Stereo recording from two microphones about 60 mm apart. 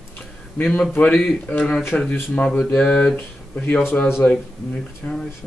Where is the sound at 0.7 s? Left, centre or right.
Centre.